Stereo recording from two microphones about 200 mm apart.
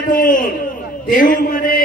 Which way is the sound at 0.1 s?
45° left (ahead or behind).